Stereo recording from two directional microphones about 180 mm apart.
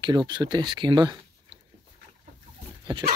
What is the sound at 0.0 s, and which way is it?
Speech, 25° right (ahead or behind).